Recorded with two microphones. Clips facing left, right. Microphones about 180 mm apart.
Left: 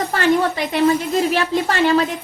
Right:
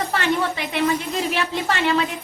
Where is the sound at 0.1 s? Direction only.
40° left (ahead or behind).